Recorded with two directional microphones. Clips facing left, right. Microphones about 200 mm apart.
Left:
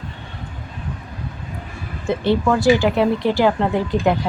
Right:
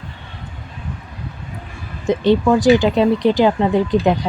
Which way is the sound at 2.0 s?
15° right (ahead or behind).